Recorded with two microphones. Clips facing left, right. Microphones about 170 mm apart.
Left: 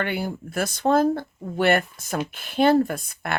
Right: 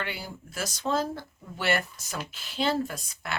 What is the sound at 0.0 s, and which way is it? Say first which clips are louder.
Speech: left 9 dB; 55° left (ahead or behind).